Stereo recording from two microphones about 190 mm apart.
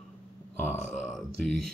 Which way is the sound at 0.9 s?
Centre (ahead or behind).